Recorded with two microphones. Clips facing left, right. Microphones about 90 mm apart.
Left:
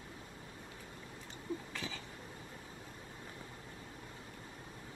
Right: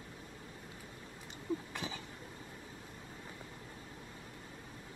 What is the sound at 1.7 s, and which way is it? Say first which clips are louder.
Cough: right 2 dB; 20° right (ahead or behind).